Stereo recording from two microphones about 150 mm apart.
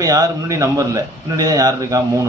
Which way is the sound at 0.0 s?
25° right (ahead or behind).